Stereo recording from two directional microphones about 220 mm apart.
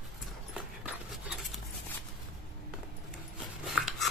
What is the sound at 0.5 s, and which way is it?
Dog, 5° right (ahead or behind).